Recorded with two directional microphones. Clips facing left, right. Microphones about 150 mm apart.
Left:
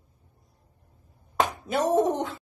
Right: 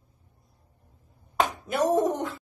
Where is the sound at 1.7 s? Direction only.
20° left (ahead or behind).